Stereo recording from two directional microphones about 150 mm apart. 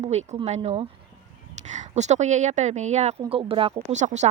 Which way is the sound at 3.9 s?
50° right (ahead or behind).